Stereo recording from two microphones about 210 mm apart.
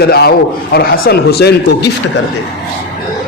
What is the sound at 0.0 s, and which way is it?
A man's voice, 50° left (ahead or behind).